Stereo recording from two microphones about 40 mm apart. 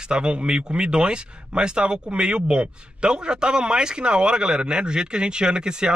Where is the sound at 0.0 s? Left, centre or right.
Right.